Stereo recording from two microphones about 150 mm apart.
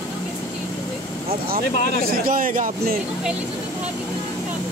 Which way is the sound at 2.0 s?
70° right (ahead or behind).